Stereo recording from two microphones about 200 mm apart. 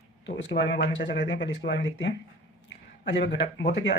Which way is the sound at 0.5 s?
60° left (ahead or behind).